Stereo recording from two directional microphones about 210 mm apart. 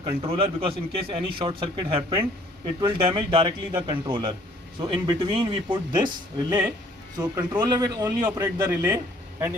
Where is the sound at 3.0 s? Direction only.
25° right (ahead or behind).